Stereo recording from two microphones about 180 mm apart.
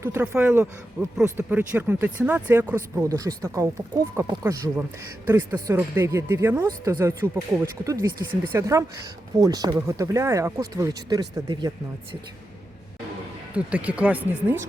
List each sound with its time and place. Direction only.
0.0 s speech: 10° right (ahead or behind)
13.6 s speech: 5° right (ahead or behind)